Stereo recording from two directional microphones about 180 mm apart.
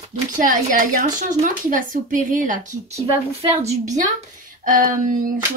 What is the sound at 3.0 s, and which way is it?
Speech, 35° right (ahead or behind).